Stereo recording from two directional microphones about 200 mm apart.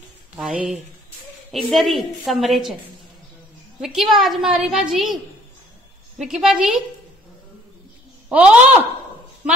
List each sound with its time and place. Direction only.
0.4 s a woman's voice: 5° right (ahead or behind)
3.8 s a woman's voice: centre (ahead or behind)
8.3 s a woman's voice: 5° right (ahead or behind)